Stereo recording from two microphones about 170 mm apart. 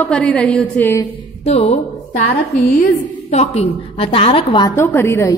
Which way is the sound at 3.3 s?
40° left (ahead or behind).